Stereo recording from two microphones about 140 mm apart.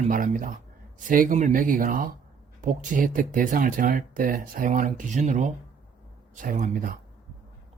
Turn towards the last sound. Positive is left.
turn(degrees=-70)  # may be behind; listen again after turning